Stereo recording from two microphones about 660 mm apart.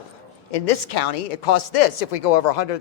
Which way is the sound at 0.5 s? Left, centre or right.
Left.